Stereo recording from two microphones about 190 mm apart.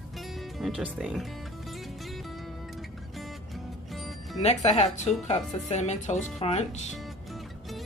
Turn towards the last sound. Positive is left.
turn(degrees=35)  # may be behind; listen again after turning